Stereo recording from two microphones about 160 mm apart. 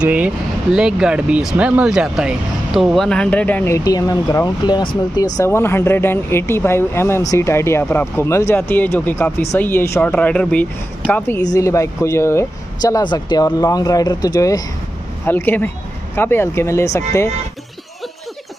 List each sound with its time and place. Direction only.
0.0 s speech: 10° right (ahead or behind); by 17.3 s 20° left (ahead or behind)